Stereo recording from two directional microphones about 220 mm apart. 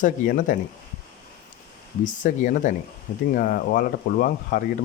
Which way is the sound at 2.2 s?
35° left (ahead or behind).